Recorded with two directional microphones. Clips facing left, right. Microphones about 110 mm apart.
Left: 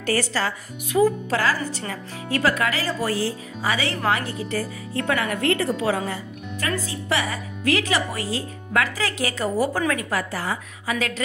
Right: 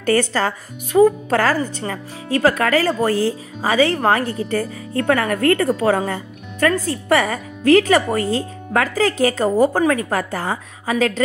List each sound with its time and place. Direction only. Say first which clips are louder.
0.0 s speech: right 6 dB; 45° right (ahead or behind)
9.8 s speech: right 7 dB; 30° right (ahead or behind)
10.0 s speech: right 4 dB; 40° right (ahead or behind)